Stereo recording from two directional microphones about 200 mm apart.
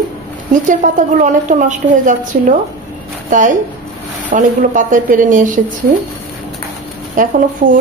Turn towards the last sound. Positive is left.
turn(degrees=-40)  # may be behind; listen again after turning